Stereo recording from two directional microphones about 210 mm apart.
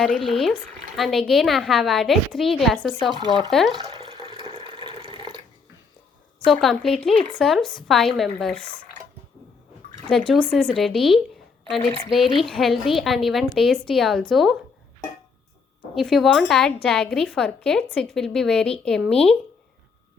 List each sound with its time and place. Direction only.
0.0 s a woman's voice: centre (ahead or behind)
4.0 s water: 25° right (ahead or behind)
6.4 s a woman's voice: centre (ahead or behind)
10.1 s a woman's voice: centre (ahead or behind)
16.0 s a woman's voice: centre (ahead or behind)